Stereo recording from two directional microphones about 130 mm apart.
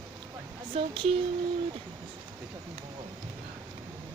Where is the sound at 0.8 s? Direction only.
45° right (ahead or behind).